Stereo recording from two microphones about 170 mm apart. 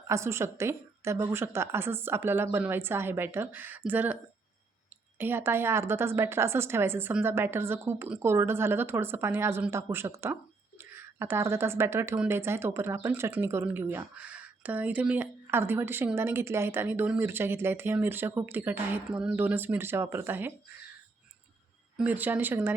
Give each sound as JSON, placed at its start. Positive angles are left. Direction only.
{"t": 0.1, "sound": "a woman's voice", "side_deg": -15}
{"t": 21.9, "sound": "a woman's voice", "side_deg": -10}